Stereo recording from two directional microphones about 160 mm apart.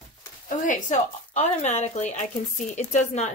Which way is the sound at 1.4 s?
45° left (ahead or behind).